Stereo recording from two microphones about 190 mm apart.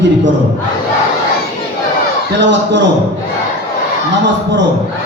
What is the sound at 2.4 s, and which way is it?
Speech, 70° right (ahead or behind).